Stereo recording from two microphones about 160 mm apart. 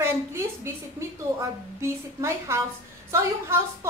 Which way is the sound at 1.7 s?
15° right (ahead or behind).